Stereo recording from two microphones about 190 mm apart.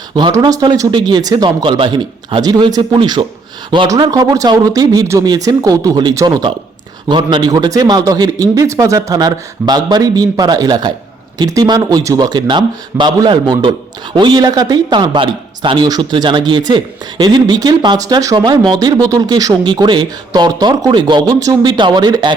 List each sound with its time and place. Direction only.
0.2 s a man's voice: 25° right (ahead or behind)